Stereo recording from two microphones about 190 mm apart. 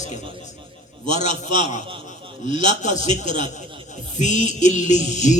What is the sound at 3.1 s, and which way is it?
Music, 40° left (ahead or behind).